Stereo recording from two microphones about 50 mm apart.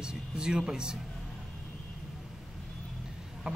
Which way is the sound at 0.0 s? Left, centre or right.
Centre.